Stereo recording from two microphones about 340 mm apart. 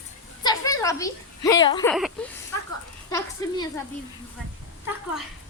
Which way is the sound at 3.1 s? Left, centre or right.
Centre.